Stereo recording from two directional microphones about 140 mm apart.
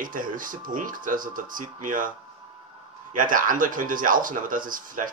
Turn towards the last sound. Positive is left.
turn(degrees=-75)  # may be behind; listen again after turning